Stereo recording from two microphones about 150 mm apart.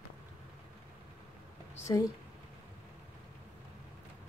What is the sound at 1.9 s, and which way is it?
Speech, 25° left (ahead or behind).